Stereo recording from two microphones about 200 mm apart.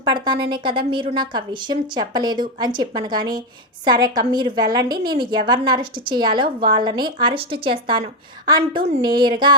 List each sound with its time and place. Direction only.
0.1 s a woman's voice: 20° right (ahead or behind)